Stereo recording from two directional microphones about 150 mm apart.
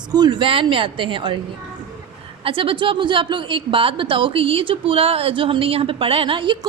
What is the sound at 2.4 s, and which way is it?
A woman's voice, 35° right (ahead or behind).